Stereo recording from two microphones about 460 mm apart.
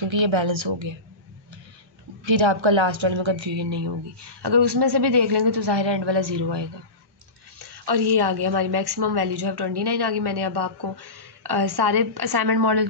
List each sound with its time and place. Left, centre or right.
0.1 s a woman's voice: right
2.2 s a woman's voice: right